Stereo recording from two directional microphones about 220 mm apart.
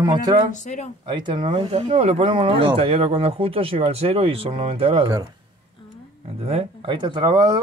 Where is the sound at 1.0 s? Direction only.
20° right (ahead or behind).